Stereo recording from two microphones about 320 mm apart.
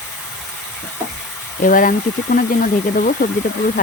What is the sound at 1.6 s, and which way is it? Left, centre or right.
Stir, left.